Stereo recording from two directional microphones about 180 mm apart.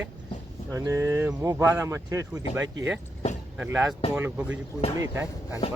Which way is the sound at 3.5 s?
10° right (ahead or behind).